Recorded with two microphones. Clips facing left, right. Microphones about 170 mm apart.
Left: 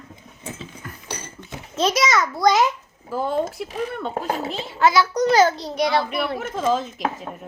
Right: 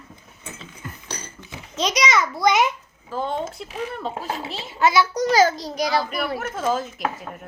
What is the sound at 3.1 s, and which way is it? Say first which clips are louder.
Speech: left 3 dB; 10° left (ahead or behind).